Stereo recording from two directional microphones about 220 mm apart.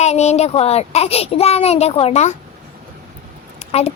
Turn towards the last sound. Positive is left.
turn(degrees=30)  # may be behind; listen again after turning